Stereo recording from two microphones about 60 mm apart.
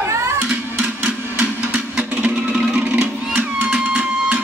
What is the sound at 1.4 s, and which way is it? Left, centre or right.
Music, right.